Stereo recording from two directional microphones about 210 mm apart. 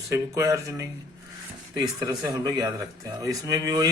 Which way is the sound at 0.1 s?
15° right (ahead or behind).